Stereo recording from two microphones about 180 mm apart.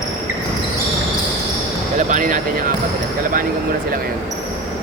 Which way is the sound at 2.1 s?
45° right (ahead or behind).